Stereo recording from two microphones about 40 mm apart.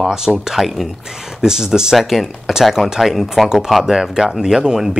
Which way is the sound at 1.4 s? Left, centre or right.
Centre.